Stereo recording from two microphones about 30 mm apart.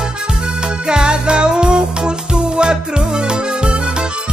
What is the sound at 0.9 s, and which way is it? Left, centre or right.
Music, right.